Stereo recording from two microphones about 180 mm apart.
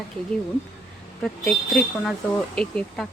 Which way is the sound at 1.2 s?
Centre (ahead or behind).